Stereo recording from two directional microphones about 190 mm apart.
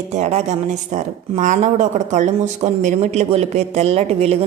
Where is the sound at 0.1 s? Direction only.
35° right (ahead or behind).